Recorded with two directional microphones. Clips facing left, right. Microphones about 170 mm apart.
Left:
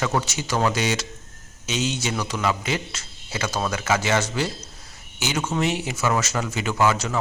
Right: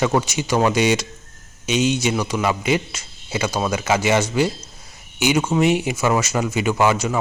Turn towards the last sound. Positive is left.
turn(degrees=-10)  # may be behind; listen again after turning